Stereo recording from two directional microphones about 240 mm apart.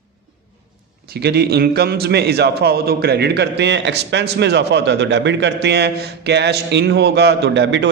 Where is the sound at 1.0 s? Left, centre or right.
Right.